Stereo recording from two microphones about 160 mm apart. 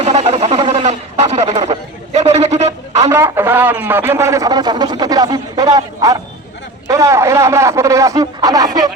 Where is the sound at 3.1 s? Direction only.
15° right (ahead or behind).